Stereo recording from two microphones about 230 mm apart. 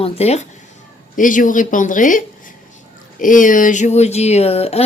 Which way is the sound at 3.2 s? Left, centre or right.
Left.